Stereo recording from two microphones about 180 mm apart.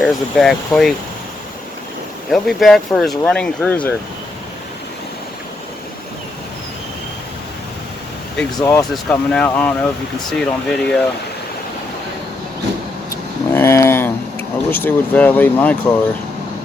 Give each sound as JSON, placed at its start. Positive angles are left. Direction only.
{"t": 0.0, "sound": "speech", "side_deg": 0}
{"t": 2.3, "sound": "speech", "side_deg": 0}
{"t": 8.5, "sound": "speech", "side_deg": 20}
{"t": 9.0, "sound": "speech", "side_deg": 5}
{"t": 13.1, "sound": "a sound", "side_deg": 15}